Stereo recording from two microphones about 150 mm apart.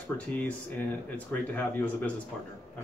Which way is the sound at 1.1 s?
10° left (ahead or behind).